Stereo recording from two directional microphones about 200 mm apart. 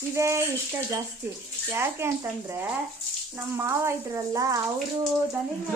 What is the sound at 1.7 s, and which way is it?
Speech, 10° right (ahead or behind).